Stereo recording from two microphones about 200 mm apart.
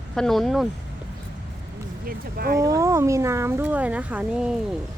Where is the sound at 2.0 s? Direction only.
50° right (ahead or behind).